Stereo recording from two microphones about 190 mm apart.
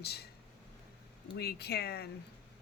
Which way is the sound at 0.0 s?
60° left (ahead or behind).